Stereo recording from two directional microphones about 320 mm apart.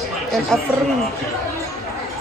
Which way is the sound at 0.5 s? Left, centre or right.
Centre.